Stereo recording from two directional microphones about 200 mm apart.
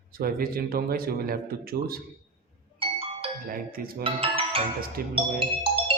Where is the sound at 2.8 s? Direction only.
30° right (ahead or behind).